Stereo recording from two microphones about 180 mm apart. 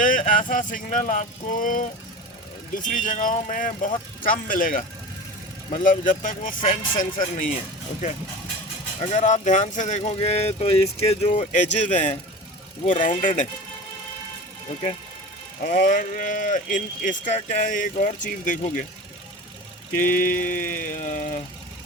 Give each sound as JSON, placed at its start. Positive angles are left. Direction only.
{"t": 0.0, "sound": "speech", "side_deg": 50}
{"t": 15.6, "sound": "speech", "side_deg": 45}
{"t": 20.1, "sound": "speech", "side_deg": 50}